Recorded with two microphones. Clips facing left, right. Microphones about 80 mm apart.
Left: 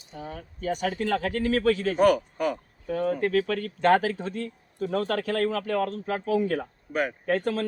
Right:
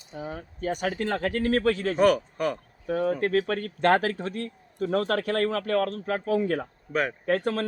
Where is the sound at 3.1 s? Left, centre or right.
Right.